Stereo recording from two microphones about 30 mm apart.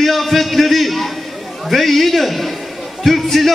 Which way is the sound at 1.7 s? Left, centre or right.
Centre.